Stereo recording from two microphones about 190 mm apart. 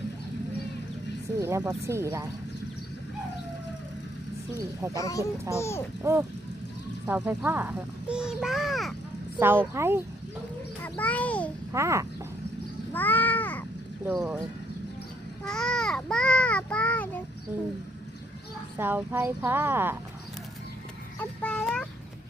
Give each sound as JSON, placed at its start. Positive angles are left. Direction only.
{"t": 1.4, "sound": "speech", "side_deg": -15}
{"t": 4.9, "sound": "a child's voice", "side_deg": 15}
{"t": 6.0, "sound": "a child's voice", "side_deg": -15}
{"t": 9.7, "sound": "speech", "side_deg": -15}
{"t": 10.8, "sound": "a sound", "side_deg": 10}
{"t": 11.7, "sound": "speech", "side_deg": -15}
{"t": 12.9, "sound": "a sound", "side_deg": 10}
{"t": 14.0, "sound": "a child's voice", "side_deg": -5}
{"t": 15.4, "sound": "child singing", "side_deg": 5}
{"t": 18.8, "sound": "speech", "side_deg": -10}
{"t": 21.2, "sound": "a sound", "side_deg": 5}